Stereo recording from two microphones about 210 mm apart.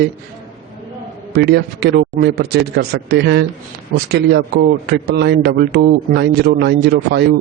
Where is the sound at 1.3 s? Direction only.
50° right (ahead or behind).